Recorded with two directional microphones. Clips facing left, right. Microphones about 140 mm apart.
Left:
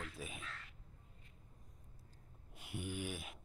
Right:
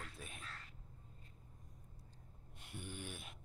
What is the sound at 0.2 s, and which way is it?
Crow, 5° left (ahead or behind).